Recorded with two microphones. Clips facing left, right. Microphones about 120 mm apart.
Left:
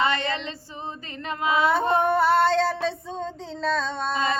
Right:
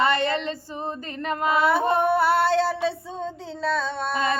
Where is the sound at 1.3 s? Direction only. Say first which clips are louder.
Right 2 dB; 50° right (ahead or behind).